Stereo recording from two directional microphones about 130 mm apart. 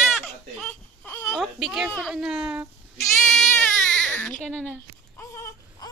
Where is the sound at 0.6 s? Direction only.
15° left (ahead or behind).